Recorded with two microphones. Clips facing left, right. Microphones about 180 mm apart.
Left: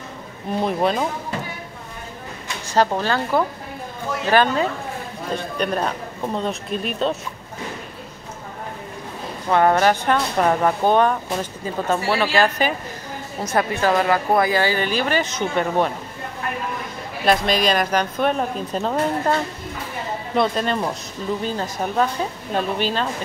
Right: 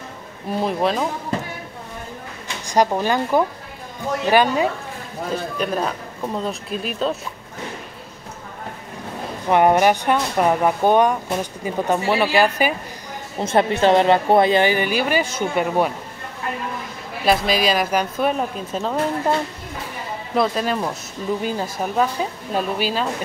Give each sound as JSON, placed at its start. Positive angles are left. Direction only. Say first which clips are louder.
{"t": 0.6, "sound": "a woman's voice", "louder": "even", "side_deg": 0}
{"t": 2.7, "sound": "a woman's voice", "louder": "right 1 dB", "side_deg": -15}
{"t": 9.5, "sound": "speech", "louder": "right 1 dB", "side_deg": -15}
{"t": 13.4, "sound": "a woman's voice", "louder": "right 4 dB", "side_deg": -25}
{"t": 17.3, "sound": "a woman's voice", "louder": "even", "side_deg": -5}
{"t": 20.3, "sound": "a woman's voice", "louder": "even", "side_deg": -5}